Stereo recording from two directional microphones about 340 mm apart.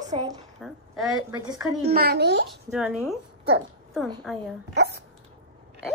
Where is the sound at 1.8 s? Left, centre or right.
Right.